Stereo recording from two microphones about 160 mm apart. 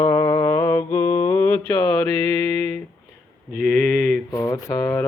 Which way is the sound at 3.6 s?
Centre (ahead or behind).